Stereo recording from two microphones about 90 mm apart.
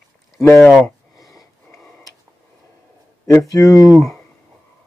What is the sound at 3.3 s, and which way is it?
Speech, 35° left (ahead or behind).